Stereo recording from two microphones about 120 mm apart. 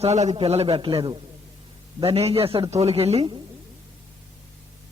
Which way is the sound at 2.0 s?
55° right (ahead or behind).